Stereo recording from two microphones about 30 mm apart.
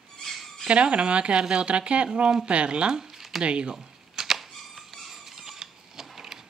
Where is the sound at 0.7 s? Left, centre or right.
Right.